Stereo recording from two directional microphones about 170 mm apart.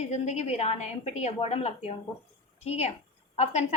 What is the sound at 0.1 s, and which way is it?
A woman's voice, 40° left (ahead or behind).